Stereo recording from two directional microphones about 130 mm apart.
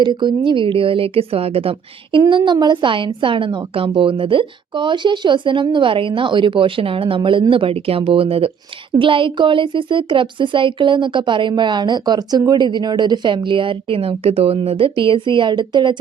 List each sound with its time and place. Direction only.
0.0 s speech: 35° right (ahead or behind)
2.3 s a woman's voice: 35° right (ahead or behind)